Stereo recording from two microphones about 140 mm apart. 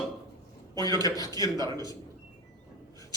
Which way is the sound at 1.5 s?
30° right (ahead or behind).